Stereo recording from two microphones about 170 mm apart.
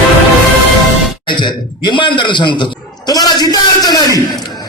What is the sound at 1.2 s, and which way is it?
A man's voice, 25° left (ahead or behind).